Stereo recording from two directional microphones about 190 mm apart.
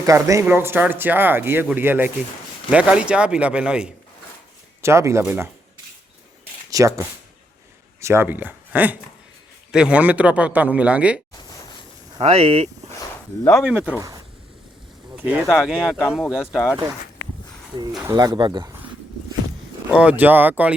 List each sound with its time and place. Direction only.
0.0 s speech: 15° right (ahead or behind)
6.7 s speech: 15° right (ahead or behind)
12.2 s speech: 30° right (ahead or behind)
13.5 s speech: 5° right (ahead or behind)
15.1 s a sound: 10° right (ahead or behind)
15.6 s speech: 5° right (ahead or behind)
18.0 s speech: 20° right (ahead or behind)
18.7 s a sound: 10° right (ahead or behind)
19.9 s speech: 5° right (ahead or behind)